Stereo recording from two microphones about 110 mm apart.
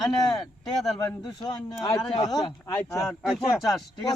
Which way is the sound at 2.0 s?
90° left.